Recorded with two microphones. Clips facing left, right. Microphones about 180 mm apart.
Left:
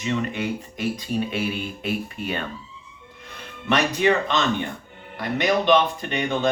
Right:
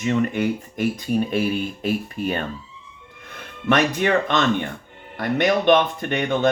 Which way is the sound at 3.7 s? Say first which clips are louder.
Right 1 dB; 50° right (ahead or behind).